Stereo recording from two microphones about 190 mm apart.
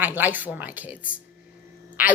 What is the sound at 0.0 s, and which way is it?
Speech, 10° right (ahead or behind).